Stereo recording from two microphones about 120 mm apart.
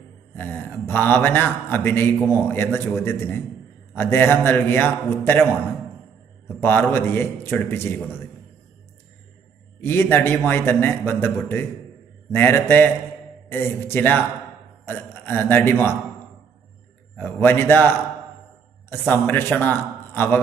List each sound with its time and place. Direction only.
0.4 s a man's voice: 15° left (ahead or behind)
6.6 s a man's voice: 15° left (ahead or behind)
9.8 s a man's voice: 15° left (ahead or behind)
17.2 s a man's voice: 20° left (ahead or behind)
18.9 s a man's voice: 15° left (ahead or behind)